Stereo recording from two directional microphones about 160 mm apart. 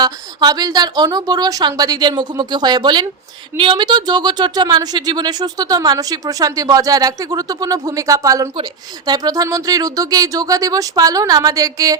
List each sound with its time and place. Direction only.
0.0 s speech: 25° right (ahead or behind)